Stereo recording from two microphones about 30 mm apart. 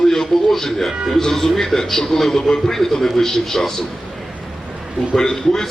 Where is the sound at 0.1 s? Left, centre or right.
Centre.